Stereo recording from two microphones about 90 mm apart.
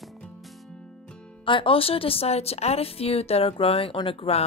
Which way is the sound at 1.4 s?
70° left (ahead or behind).